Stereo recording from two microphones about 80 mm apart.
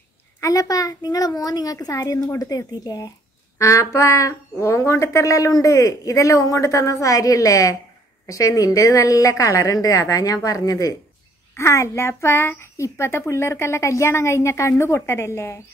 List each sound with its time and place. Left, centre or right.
0.4 s speech: left
3.5 s speech: left
11.5 s a woman's voice: left